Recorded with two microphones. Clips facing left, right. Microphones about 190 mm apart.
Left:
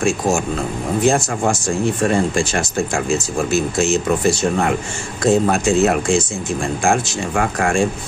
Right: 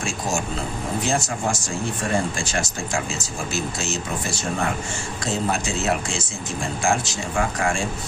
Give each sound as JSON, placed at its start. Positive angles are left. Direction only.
{"t": 1.0, "sound": "speech", "side_deg": 55}
{"t": 5.2, "sound": "speech", "side_deg": 55}